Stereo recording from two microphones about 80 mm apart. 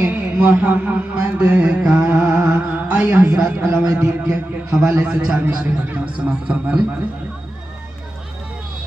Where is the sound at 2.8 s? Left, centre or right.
Centre.